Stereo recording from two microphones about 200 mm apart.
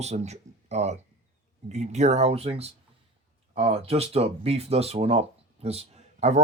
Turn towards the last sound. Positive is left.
turn(degrees=-35)  # may be behind; listen again after turning